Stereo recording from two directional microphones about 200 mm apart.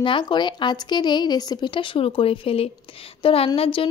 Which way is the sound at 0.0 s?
25° left (ahead or behind).